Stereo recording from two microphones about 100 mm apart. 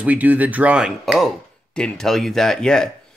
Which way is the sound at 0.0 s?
15° right (ahead or behind).